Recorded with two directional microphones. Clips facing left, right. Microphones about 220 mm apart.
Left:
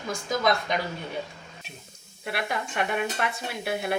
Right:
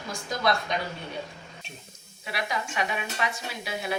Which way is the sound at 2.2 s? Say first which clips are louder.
Left 2 dB; 55° left (ahead or behind).